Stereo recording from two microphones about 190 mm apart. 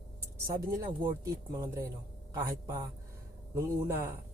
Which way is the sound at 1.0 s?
15° right (ahead or behind).